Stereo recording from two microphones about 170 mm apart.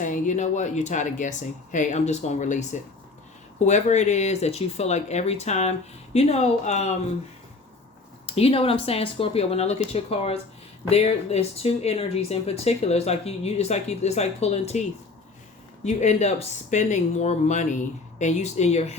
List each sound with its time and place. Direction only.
0.0 s speech: 45° left (ahead or behind)
8.3 s speech: 35° left (ahead or behind)